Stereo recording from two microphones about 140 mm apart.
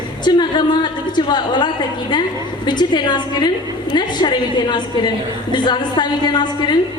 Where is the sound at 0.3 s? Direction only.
30° left (ahead or behind).